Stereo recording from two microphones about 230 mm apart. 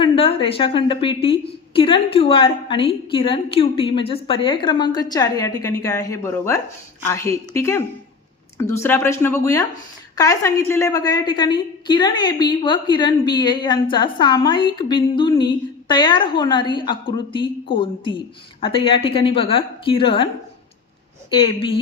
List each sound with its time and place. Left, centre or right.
0.0 s a woman's voice: left
21.2 s a woman's voice: left